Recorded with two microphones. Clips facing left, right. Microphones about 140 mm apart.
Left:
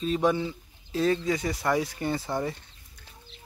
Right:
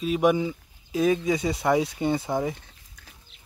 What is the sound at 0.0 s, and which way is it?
Speech, 10° right (ahead or behind).